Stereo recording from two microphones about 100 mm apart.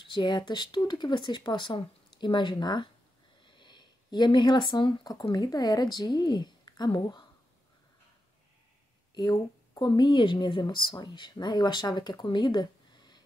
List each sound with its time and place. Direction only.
0.0 s speech: 50° left (ahead or behind)
3.4 s a sound: 50° left (ahead or behind)
5.3 s speech: 40° left (ahead or behind)
9.1 s speech: 45° left (ahead or behind)